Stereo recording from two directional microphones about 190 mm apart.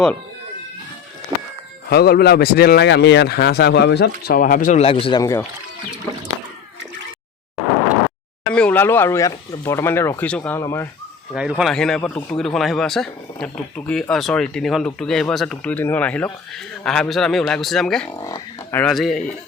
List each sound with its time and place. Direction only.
1.3 s livestock: 20° right (ahead or behind)
1.9 s speech: 55° left (ahead or behind)
4.8 s speech: 30° left (ahead or behind)
5.2 s speech: 15° left (ahead or behind)
8.5 s speech: 10° left (ahead or behind)
11.3 s speech: 5° right (ahead or behind)
18.1 s speech: 20° left (ahead or behind)
18.8 s speech: centre (ahead or behind)